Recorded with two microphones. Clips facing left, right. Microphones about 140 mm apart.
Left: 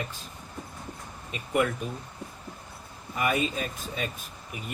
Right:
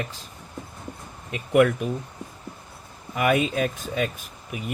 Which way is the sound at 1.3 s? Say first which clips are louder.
Right 8 dB; 80° right.